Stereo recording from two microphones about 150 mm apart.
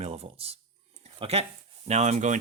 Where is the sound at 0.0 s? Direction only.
40° right (ahead or behind).